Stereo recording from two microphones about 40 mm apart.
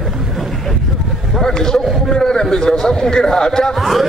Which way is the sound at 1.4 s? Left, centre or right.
Centre.